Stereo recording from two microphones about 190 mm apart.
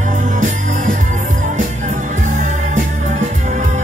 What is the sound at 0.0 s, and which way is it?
Music, 40° right (ahead or behind).